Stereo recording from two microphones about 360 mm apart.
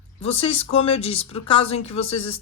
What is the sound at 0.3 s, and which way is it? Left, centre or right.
Speech, centre.